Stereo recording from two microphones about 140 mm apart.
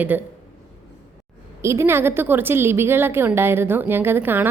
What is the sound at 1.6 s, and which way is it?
A woman's voice, 20° right (ahead or behind).